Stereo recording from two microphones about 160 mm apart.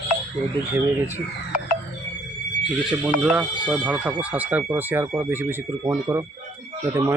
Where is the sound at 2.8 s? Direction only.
5° right (ahead or behind).